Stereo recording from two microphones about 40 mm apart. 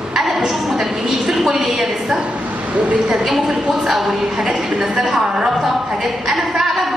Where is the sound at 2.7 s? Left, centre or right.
Right.